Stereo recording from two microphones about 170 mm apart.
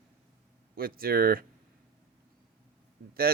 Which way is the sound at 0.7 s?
60° right (ahead or behind).